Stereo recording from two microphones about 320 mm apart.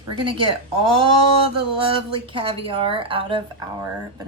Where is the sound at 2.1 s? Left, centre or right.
Centre.